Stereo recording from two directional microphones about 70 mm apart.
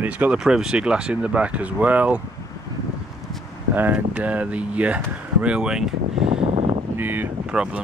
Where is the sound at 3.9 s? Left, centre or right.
Right.